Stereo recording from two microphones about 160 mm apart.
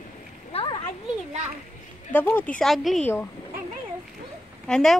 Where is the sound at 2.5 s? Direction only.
Centre (ahead or behind).